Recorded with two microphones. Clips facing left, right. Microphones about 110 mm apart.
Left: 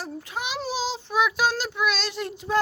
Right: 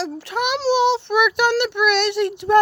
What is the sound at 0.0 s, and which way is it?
A child's voice, 75° right (ahead or behind).